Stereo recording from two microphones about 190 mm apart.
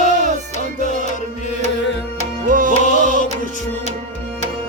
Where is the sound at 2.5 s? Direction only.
45° right (ahead or behind).